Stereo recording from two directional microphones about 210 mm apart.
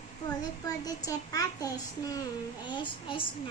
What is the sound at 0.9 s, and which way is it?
A child's voice, 15° left (ahead or behind).